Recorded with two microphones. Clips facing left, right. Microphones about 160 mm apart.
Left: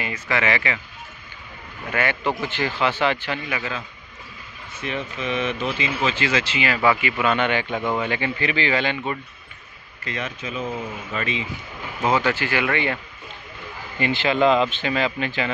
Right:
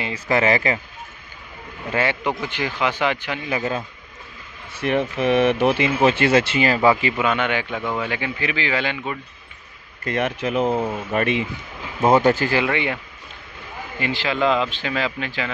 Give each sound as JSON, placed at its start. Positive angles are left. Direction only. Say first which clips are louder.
{"t": 0.0, "sound": "speech", "louder": "right 4 dB", "side_deg": -35}
{"t": 1.9, "sound": "a man's voice", "louder": "right 1 dB", "side_deg": -25}
{"t": 3.4, "sound": "speech", "louder": "right 5 dB", "side_deg": -40}
{"t": 4.7, "sound": "speech", "louder": "right 8 dB", "side_deg": -60}
{"t": 7.2, "sound": "speech", "louder": "even", "side_deg": -10}
{"t": 7.7, "sound": "a man's voice", "louder": "left 1 dB", "side_deg": 15}
{"t": 8.1, "sound": "speech", "louder": "left 1 dB", "side_deg": -5}
{"t": 10.0, "sound": "speech", "louder": "right 8 dB", "side_deg": -60}
{"t": 12.0, "sound": "speech", "louder": "right 6 dB", "side_deg": -45}
{"t": 12.6, "sound": "speech", "louder": "right 1 dB", "side_deg": -15}
{"t": 13.9, "sound": "speech", "louder": "left 3 dB", "side_deg": 0}